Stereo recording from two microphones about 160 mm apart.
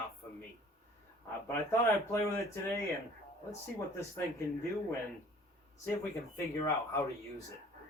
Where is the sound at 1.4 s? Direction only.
20° left (ahead or behind).